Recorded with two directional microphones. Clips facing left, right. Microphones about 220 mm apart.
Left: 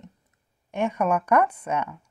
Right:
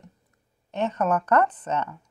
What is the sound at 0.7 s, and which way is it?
Speech, 10° left (ahead or behind).